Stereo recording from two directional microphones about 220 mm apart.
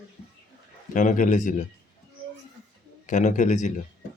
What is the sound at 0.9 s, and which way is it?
Speech, 35° left (ahead or behind).